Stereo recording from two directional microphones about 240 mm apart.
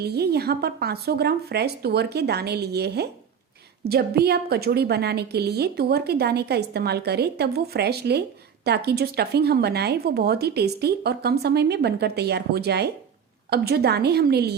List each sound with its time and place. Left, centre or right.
0.0 s a woman's voice: right